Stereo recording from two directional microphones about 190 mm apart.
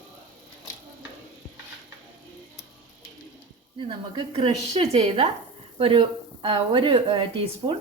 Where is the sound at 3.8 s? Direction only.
30° right (ahead or behind).